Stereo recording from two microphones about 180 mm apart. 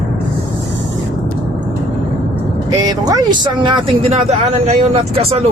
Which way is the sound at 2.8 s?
20° right (ahead or behind).